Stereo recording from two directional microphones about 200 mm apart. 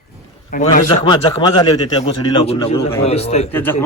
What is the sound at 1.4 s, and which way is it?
A man's voice, 25° left (ahead or behind).